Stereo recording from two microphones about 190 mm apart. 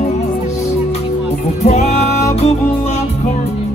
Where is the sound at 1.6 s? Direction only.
35° left (ahead or behind).